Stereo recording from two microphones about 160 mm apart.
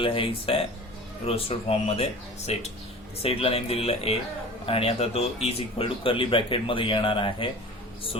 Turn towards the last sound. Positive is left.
turn(degrees=30)  # may be behind; listen again after turning